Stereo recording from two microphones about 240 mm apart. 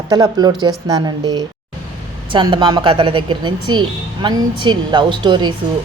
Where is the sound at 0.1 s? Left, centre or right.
Centre.